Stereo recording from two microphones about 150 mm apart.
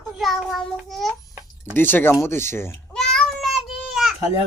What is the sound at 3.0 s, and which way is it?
Child singing, 5° left (ahead or behind).